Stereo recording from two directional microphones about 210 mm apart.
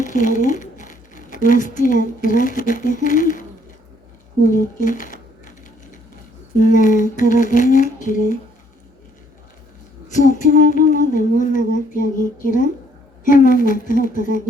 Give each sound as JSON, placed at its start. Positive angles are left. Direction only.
{"t": 0.0, "sound": "speech", "side_deg": 35}
{"t": 4.4, "sound": "speech", "side_deg": 40}
{"t": 6.6, "sound": "speech", "side_deg": 40}
{"t": 10.1, "sound": "speech", "side_deg": 35}